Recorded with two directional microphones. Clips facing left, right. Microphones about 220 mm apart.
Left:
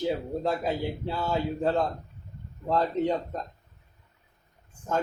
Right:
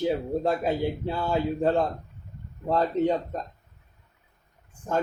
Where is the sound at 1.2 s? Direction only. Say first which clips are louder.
Right 3 dB; 15° right (ahead or behind).